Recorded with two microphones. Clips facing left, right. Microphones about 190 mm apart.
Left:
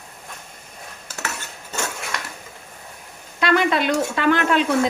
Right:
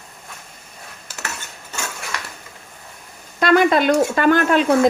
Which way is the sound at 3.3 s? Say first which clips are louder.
Right 4 dB; 45° right (ahead or behind).